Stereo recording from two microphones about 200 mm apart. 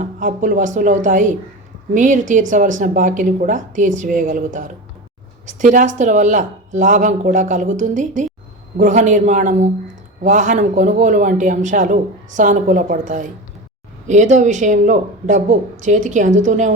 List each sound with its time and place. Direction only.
0.0 s speech: 40° right (ahead or behind)